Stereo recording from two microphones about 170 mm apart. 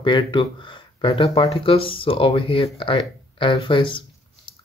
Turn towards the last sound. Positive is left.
turn(degrees=30)  # may be behind; listen again after turning